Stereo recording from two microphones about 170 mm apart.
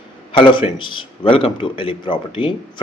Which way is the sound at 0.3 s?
30° left (ahead or behind).